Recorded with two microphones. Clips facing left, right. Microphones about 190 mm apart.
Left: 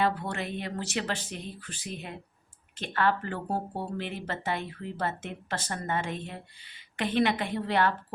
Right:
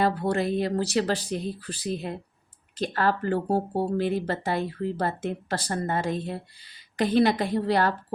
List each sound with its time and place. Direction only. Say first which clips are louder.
0.0 s speech: right 5 dB; 35° right (ahead or behind)